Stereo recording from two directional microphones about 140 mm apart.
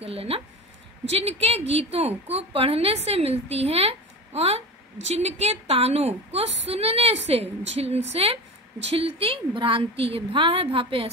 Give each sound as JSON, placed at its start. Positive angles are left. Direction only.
{"t": 0.0, "sound": "a woman's voice", "side_deg": -45}